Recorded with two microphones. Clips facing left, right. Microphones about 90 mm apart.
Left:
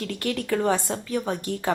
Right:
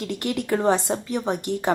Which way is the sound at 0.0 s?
20° right (ahead or behind).